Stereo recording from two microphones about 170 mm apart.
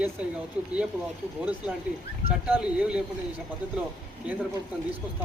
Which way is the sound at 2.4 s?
5° right (ahead or behind).